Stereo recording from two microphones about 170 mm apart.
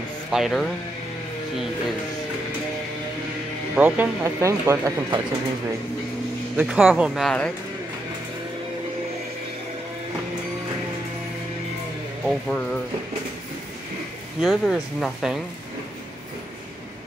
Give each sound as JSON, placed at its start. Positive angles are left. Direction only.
{"t": 0.3, "sound": "speech", "side_deg": 0}
{"t": 3.7, "sound": "speech", "side_deg": -10}
{"t": 6.5, "sound": "speech", "side_deg": -5}
{"t": 12.3, "sound": "speech", "side_deg": 5}
{"t": 14.4, "sound": "speech", "side_deg": 0}